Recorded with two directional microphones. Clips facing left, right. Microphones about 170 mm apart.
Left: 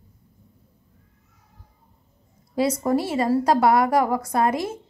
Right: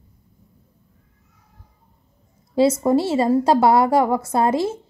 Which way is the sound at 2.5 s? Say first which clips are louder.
Right 5 dB; 25° right (ahead or behind).